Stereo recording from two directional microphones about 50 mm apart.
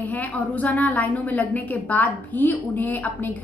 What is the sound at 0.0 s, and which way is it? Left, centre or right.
A woman's voice, left.